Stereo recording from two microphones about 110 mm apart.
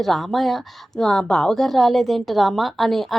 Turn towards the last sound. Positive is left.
turn(degrees=0)  # may be behind; listen again after turning